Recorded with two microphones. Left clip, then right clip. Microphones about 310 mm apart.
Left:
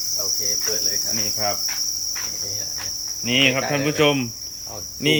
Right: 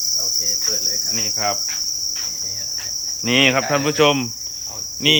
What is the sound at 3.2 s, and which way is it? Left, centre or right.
Cricket, centre.